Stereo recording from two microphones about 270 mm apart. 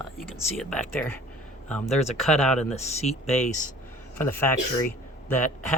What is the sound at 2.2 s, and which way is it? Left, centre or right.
Speech, centre.